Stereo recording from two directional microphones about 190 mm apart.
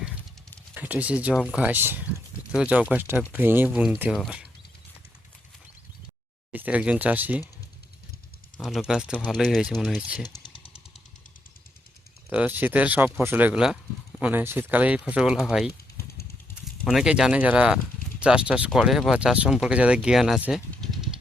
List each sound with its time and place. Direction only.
0.7 s speech: 10° right (ahead or behind)
6.5 s speech: 10° right (ahead or behind)
8.5 s a sound: centre (ahead or behind)
8.9 s speech: 5° right (ahead or behind)
10.2 s a sound: 20° left (ahead or behind)
12.3 s speech: 10° right (ahead or behind)
16.8 s speech: centre (ahead or behind)